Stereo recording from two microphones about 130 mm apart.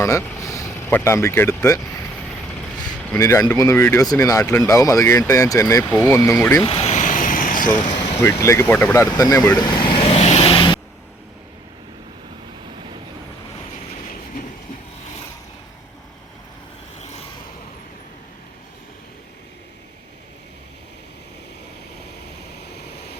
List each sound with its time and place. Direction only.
0.0 s vehicle: 25° left (ahead or behind)
3.2 s speech: 25° left (ahead or behind)
6.7 s speech: 45° left (ahead or behind)
6.9 s vehicle: 85° left
8.2 s speech: 20° left (ahead or behind)
9.0 s vehicle: 30° left (ahead or behind)